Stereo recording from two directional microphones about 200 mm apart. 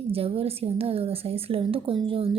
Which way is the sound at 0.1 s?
30° right (ahead or behind).